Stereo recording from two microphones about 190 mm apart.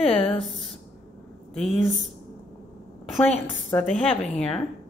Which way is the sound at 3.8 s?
Centre (ahead or behind).